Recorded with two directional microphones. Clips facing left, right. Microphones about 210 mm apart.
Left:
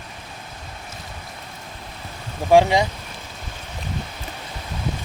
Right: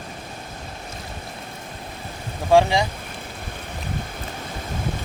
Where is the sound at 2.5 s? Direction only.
20° left (ahead or behind).